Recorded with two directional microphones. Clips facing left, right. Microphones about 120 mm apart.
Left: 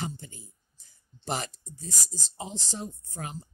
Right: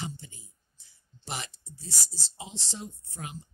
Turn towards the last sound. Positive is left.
turn(degrees=40)  # may be behind; listen again after turning